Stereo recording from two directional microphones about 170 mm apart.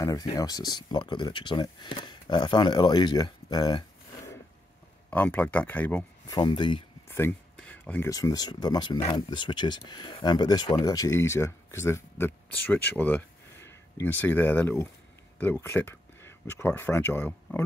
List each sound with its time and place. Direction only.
0.0 s speech: 20° left (ahead or behind)
5.1 s speech: 10° left (ahead or behind)
6.3 s speech: 25° left (ahead or behind)
7.1 s a sound: 15° left (ahead or behind)
8.1 s speech: 20° left (ahead or behind)